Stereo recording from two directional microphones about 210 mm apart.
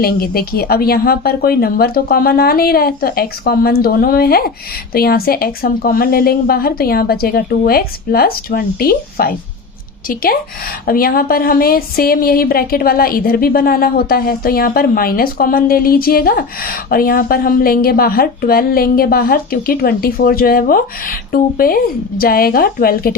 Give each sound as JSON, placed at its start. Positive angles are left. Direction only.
{"t": 0.0, "sound": "speech", "side_deg": 45}
{"t": 10.8, "sound": "speech", "side_deg": 45}